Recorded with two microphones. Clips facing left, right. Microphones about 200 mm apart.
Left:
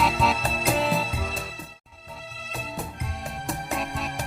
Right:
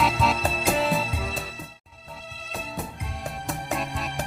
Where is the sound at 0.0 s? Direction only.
Centre (ahead or behind).